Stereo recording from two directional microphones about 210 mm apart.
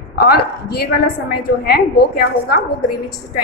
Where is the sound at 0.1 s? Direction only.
50° left (ahead or behind).